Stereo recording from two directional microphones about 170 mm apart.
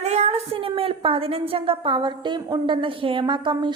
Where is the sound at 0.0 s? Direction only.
40° right (ahead or behind).